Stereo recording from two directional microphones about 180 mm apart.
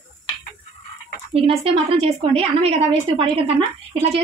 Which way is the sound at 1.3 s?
30° right (ahead or behind).